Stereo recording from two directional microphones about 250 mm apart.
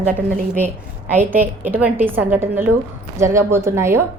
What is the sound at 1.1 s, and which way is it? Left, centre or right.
A woman's voice, centre.